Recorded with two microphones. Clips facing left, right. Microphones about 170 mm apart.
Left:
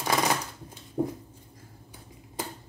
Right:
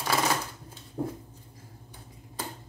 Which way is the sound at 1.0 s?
15° left (ahead or behind).